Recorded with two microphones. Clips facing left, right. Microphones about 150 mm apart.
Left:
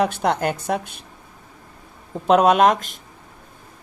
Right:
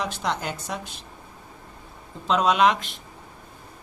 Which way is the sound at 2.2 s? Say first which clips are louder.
Left 5 dB; 55° left (ahead or behind).